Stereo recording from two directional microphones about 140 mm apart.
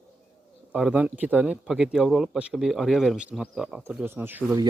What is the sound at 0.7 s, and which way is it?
Speech, 5° right (ahead or behind).